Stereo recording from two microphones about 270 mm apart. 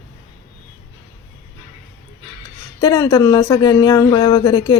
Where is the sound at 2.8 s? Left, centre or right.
Centre.